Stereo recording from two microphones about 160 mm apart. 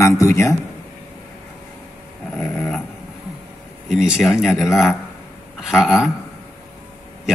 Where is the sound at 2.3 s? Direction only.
5° left (ahead or behind).